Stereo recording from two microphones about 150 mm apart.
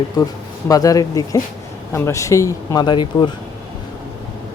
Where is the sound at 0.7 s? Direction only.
25° left (ahead or behind).